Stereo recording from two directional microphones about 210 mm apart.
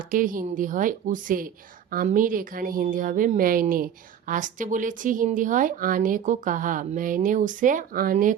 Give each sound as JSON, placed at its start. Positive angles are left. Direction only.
{"t": 0.1, "sound": "a woman's voice", "side_deg": -40}